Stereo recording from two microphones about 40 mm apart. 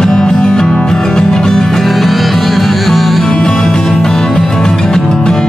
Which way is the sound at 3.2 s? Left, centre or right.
Centre.